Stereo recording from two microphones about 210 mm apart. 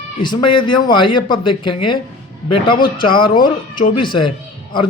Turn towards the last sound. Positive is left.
turn(degrees=25)  # may be behind; listen again after turning